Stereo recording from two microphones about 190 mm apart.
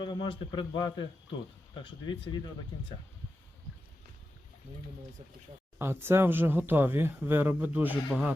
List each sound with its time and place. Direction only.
0.0 s a man's voice: 25° left (ahead or behind)
5.8 s speech: 15° right (ahead or behind)